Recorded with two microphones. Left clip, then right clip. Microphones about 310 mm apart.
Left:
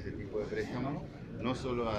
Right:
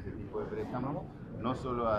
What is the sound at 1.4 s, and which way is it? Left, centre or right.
Speech, centre.